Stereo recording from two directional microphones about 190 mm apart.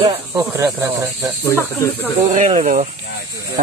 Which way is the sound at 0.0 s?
15° right (ahead or behind).